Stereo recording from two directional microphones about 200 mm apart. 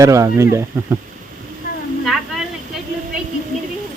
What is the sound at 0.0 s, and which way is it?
Speech, 15° right (ahead or behind).